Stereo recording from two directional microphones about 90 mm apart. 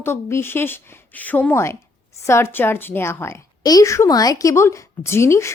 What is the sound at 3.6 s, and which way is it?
Speech, 45° left (ahead or behind).